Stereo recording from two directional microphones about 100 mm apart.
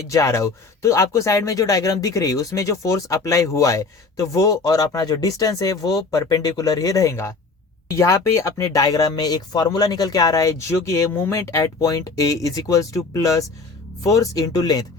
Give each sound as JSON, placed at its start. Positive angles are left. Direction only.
{"t": 0.1, "sound": "speech", "side_deg": 30}